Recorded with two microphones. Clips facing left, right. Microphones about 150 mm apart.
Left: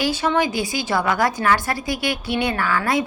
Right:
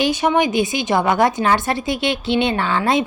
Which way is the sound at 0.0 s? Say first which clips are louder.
Right 3 dB; 15° right (ahead or behind).